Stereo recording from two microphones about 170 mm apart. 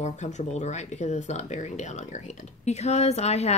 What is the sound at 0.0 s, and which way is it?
A woman's voice, 40° left (ahead or behind).